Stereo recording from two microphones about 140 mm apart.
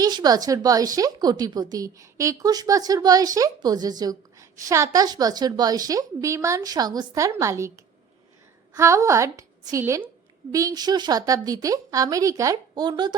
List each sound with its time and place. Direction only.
0.0 s a woman's voice: 30° right (ahead or behind)
8.7 s a woman's voice: 20° right (ahead or behind)